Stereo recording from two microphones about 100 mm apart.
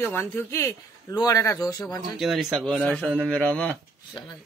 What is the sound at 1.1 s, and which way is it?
Speech, 35° left (ahead or behind).